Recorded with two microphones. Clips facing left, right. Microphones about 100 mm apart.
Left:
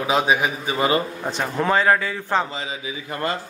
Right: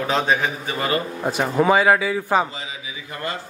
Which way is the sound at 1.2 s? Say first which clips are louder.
Right 4 dB; 10° right (ahead or behind).